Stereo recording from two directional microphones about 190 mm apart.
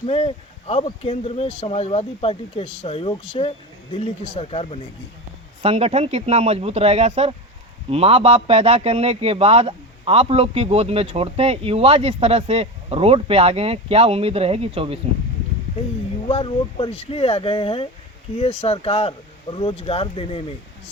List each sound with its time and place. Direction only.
0.0 s speech: 30° left (ahead or behind)
5.6 s speech: 30° right (ahead or behind)
16.2 s speech: 30° left (ahead or behind)